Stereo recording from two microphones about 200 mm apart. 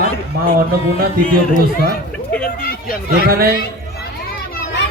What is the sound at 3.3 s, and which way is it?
Speech, 50° right (ahead or behind).